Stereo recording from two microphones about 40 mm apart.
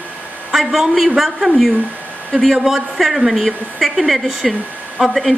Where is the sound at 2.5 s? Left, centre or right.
Centre.